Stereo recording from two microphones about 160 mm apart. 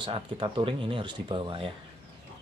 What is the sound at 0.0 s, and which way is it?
Speech, 30° right (ahead or behind).